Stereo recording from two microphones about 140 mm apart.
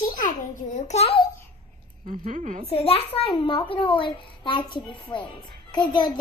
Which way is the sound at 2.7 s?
45° left (ahead or behind).